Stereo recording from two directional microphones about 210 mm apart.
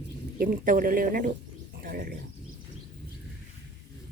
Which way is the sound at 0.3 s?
40° right (ahead or behind).